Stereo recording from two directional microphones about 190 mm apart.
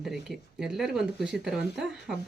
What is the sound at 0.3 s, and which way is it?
Speech, centre (ahead or behind).